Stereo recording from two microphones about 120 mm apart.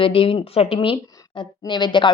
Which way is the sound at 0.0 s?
45° left (ahead or behind).